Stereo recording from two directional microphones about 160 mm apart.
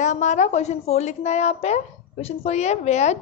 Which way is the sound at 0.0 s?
50° left (ahead or behind).